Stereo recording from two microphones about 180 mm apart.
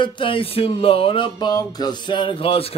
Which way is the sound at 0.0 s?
30° left (ahead or behind).